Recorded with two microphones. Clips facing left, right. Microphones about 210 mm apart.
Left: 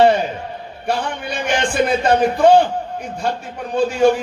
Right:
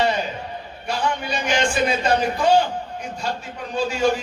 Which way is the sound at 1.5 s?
55° left (ahead or behind).